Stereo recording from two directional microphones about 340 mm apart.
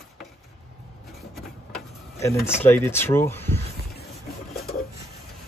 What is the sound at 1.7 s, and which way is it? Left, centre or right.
Speech, centre.